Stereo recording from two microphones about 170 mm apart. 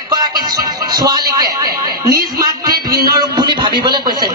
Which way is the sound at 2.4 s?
25° right (ahead or behind).